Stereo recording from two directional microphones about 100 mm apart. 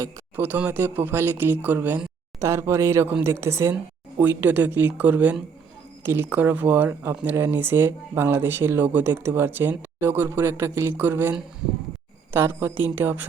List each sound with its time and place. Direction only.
0.3 s speech: 20° right (ahead or behind)
4.2 s speech: 15° right (ahead or behind)